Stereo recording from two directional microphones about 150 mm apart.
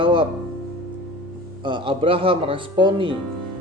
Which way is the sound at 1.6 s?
35° right (ahead or behind).